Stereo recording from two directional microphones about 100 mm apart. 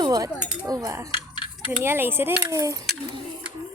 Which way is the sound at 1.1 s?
55° left (ahead or behind).